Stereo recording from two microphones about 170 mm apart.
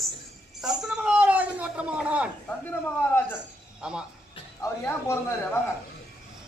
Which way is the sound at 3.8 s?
5° right (ahead or behind).